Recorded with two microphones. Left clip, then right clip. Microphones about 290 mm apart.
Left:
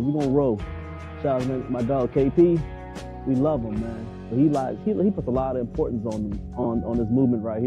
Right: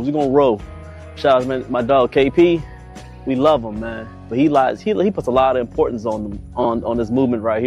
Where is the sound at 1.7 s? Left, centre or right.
Right.